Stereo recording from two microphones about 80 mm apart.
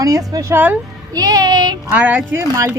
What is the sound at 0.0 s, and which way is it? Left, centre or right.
Speech, right.